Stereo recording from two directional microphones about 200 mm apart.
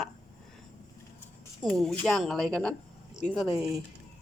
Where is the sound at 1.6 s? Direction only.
Centre (ahead or behind).